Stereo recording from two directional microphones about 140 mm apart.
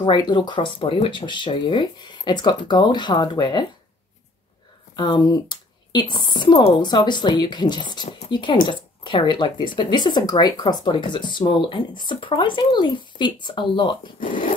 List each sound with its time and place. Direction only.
0.0 s speech: 30° left (ahead or behind)
4.9 s speech: 30° left (ahead or behind)